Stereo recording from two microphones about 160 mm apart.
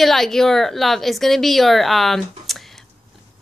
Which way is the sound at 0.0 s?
Centre (ahead or behind).